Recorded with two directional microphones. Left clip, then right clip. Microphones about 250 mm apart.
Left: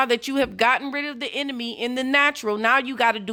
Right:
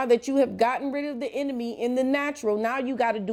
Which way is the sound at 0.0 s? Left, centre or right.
Centre.